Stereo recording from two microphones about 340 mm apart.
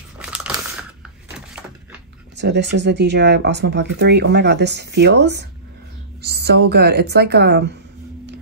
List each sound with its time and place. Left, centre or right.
0.2 s crumpling: centre
2.3 s speech: right
6.2 s a sound: right
6.7 s speech: right